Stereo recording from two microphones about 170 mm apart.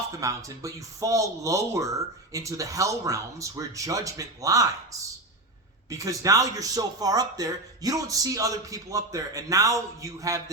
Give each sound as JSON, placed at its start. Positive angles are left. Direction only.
{"t": 0.1, "sound": "speech", "side_deg": -20}